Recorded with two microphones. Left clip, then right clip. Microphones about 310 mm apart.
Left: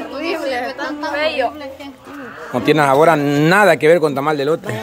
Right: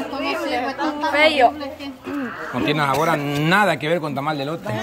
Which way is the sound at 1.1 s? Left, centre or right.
Right.